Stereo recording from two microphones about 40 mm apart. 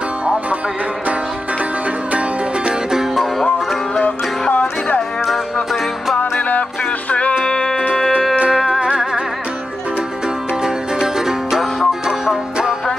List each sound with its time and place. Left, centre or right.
4.0 s music: left
5.2 s music: centre
6.1 s music: left
7.4 s music: centre
8.6 s music: centre
10.6 s music: centre